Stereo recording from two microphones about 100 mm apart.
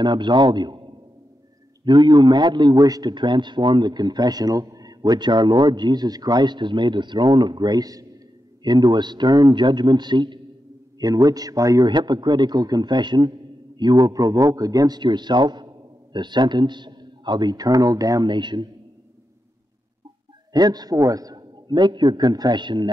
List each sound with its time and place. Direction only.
0.0 s a man's voice: 50° right (ahead or behind)
1.9 s a man's voice: 45° right (ahead or behind)
11.0 s speech: 40° right (ahead or behind)
11.9 s a man's voice: 45° right (ahead or behind)
18.3 s a man's voice: 50° right (ahead or behind)
20.5 s a man's voice: 40° right (ahead or behind)